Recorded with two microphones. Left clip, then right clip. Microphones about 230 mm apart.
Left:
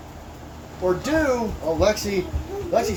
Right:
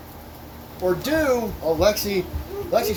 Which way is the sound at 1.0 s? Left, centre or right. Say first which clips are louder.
Right 1 dB; right.